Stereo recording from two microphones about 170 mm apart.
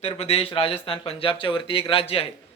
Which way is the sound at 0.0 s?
40° left (ahead or behind).